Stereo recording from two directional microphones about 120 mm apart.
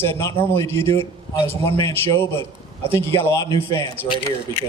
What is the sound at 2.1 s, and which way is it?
A man's voice, 20° left (ahead or behind).